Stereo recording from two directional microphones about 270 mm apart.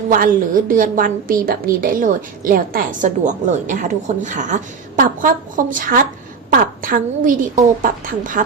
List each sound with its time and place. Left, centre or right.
0.1 s a woman's voice: right